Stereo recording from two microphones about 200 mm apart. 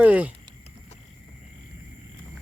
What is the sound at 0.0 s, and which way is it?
Speech, 5° right (ahead or behind).